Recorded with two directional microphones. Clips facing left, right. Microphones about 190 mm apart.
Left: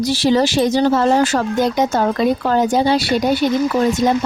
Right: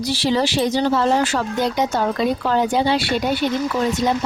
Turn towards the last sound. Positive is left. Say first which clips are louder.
# left 4 dB
turn(degrees=45)  # may be behind; listen again after turning